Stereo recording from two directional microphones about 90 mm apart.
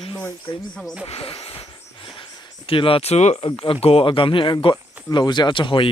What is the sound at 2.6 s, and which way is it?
Speech, 90° left.